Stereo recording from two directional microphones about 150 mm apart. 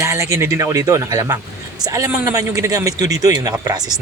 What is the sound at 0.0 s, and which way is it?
Speech, 20° right (ahead or behind).